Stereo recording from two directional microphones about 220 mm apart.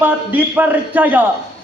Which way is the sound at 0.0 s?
10° right (ahead or behind).